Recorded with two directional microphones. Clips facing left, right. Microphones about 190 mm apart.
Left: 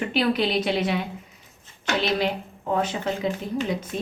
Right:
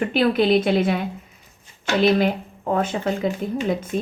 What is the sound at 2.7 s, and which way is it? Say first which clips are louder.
A woman's voice: right 3 dB; 50° right (ahead or behind).